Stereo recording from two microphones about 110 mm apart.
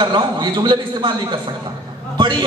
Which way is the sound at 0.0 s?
45° right (ahead or behind).